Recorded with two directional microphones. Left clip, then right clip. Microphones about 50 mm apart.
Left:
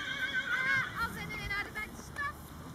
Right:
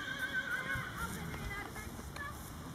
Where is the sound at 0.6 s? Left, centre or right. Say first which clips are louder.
Left 8 dB; centre.